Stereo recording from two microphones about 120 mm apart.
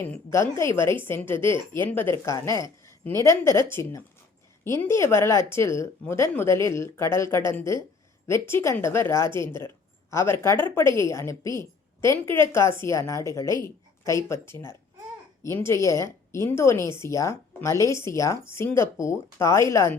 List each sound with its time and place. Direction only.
0.1 s speech: 25° left (ahead or behind)
2.8 s a sound: 20° left (ahead or behind)
3.2 s speech: 25° left (ahead or behind)